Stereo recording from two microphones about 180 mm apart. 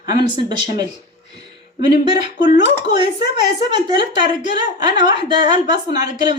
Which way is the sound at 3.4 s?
25° right (ahead or behind).